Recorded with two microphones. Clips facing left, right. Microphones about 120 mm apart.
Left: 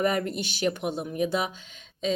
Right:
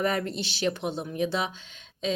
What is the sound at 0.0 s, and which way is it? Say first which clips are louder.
Speech: left 2 dB; 5° left (ahead or behind).